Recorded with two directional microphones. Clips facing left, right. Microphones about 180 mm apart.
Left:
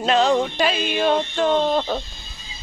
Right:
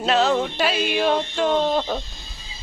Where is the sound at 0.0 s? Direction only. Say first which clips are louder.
Left 2 dB; 5° right (ahead or behind).